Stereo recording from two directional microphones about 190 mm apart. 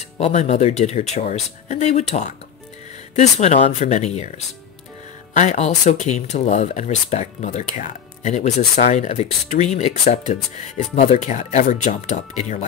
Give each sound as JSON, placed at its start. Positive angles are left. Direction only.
{"t": 0.2, "sound": "speech", "side_deg": 35}
{"t": 5.3, "sound": "speech", "side_deg": 40}